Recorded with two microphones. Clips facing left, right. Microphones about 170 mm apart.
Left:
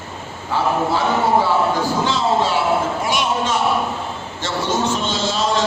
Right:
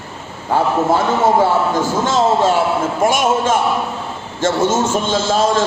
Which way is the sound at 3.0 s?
50° right (ahead or behind).